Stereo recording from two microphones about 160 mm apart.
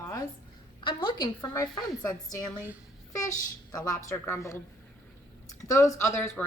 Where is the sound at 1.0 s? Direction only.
25° left (ahead or behind).